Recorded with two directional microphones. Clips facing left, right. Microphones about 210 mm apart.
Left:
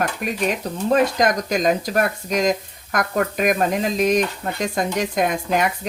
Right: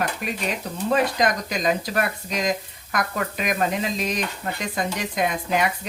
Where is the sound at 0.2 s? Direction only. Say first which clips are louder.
Left 5 dB; 50° left (ahead or behind).